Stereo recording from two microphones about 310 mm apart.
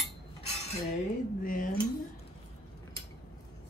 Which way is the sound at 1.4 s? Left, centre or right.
Left.